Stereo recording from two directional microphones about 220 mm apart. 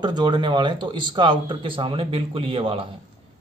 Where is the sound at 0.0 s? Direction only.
20° right (ahead or behind).